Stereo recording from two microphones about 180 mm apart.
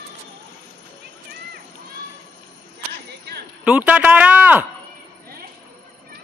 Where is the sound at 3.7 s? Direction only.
5° right (ahead or behind).